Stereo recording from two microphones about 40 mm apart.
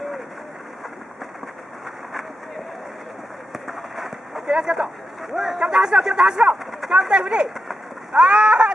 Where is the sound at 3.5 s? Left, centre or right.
Centre.